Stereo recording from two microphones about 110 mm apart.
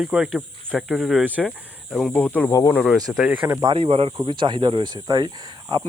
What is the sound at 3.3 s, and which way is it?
Speech, 15° right (ahead or behind).